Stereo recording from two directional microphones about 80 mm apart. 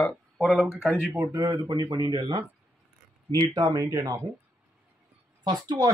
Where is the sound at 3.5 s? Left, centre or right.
Right.